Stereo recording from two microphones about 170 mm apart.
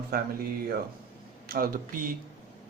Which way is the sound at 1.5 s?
60° right (ahead or behind).